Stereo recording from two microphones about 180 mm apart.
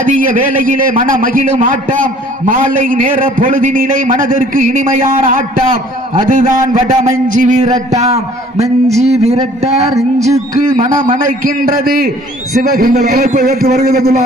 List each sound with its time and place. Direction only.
0.0 s a man's voice: 50° right (ahead or behind)
7.9 s a sound: 40° right (ahead or behind)
10.2 s a man's voice: 40° right (ahead or behind); by 14.2 s 55° right (ahead or behind)